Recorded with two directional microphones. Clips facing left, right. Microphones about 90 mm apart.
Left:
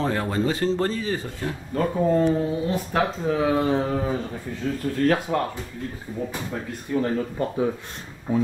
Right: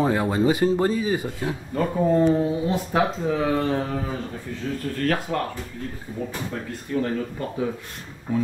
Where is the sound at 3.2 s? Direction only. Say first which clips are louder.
Left 1 dB; 5° left (ahead or behind).